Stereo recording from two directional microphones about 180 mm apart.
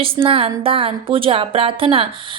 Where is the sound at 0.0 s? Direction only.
30° right (ahead or behind).